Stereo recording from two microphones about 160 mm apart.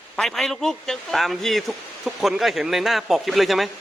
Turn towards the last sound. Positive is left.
turn(degrees=0)  # may be behind; listen again after turning